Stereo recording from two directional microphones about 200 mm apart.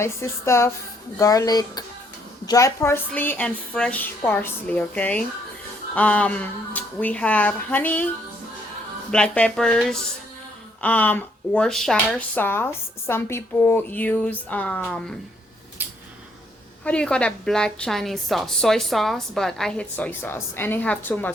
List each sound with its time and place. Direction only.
0.0 s a woman's voice: 15° left (ahead or behind)
9.1 s a woman's voice: 5° left (ahead or behind)
15.8 s a sound: 10° right (ahead or behind)
16.8 s a woman's voice: 5° left (ahead or behind)